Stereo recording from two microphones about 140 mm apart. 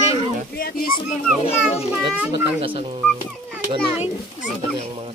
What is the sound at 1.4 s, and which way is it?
Speech, 45° left (ahead or behind).